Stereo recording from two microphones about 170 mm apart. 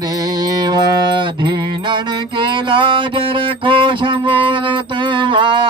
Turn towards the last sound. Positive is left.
turn(degrees=-30)  # may be behind; listen again after turning